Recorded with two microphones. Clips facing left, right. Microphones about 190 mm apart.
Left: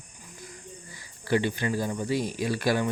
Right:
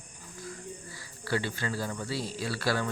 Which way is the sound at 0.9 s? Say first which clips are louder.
Left 6 dB; 20° left (ahead or behind).